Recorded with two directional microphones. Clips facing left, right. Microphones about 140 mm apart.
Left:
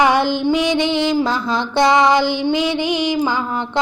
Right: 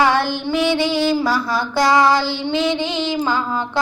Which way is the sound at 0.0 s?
15° left (ahead or behind).